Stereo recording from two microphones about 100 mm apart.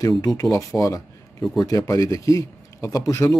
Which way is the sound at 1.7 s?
35° left (ahead or behind).